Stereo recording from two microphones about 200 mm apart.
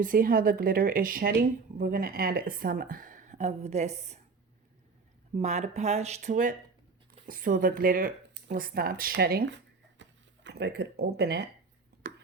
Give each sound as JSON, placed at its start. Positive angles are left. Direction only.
{"t": 0.0, "sound": "speech", "side_deg": -45}
{"t": 5.3, "sound": "speech", "side_deg": -35}
{"t": 10.0, "sound": "a sound", "side_deg": -60}